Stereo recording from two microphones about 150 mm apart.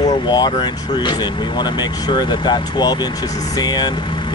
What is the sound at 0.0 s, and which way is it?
Speech, 30° left (ahead or behind).